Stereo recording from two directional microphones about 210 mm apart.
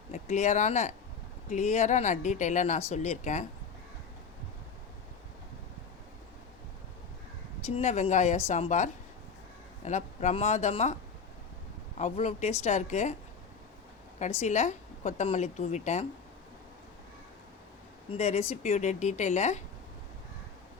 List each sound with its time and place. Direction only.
0.1 s a woman's voice: 35° left (ahead or behind)
7.8 s a woman's voice: 35° left (ahead or behind)
11.9 s a woman's voice: 35° left (ahead or behind)
14.2 s a woman's voice: 30° left (ahead or behind)
18.1 s a woman's voice: 30° left (ahead or behind)